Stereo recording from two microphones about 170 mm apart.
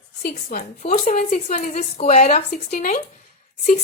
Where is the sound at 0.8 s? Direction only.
40° left (ahead or behind).